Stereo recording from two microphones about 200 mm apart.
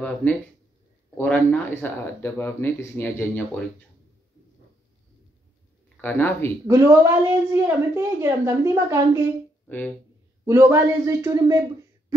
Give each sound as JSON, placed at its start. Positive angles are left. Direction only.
{"t": 0.0, "sound": "speech", "side_deg": 5}
{"t": 5.9, "sound": "speech", "side_deg": 10}
{"t": 6.7, "sound": "a woman's voice", "side_deg": -15}
{"t": 9.7, "sound": "speech", "side_deg": 10}
{"t": 10.4, "sound": "a woman's voice", "side_deg": -15}